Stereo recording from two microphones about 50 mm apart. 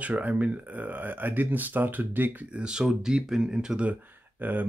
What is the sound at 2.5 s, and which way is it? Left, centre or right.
Speech, centre.